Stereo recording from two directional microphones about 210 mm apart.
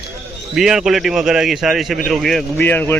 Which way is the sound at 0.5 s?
Centre (ahead or behind).